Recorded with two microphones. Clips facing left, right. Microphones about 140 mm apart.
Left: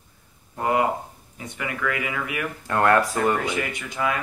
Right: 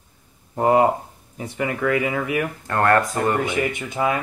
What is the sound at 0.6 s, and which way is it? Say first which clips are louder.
Speech: right 6 dB; 35° right (ahead or behind).